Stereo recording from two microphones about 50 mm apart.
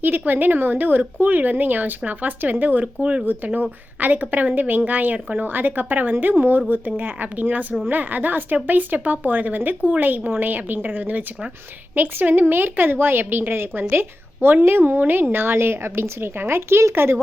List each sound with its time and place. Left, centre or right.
0.0 s a woman's voice: right
2.8 s speech: right
3.2 s a woman's voice: right